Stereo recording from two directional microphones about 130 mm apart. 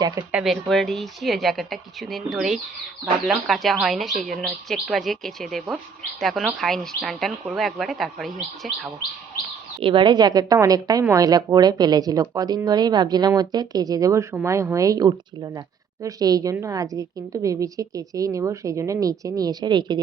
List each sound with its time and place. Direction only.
0.0 s a woman's voice: 25° right (ahead or behind)
0.3 s speech: 5° right (ahead or behind)
9.8 s a woman's voice: 40° right (ahead or behind)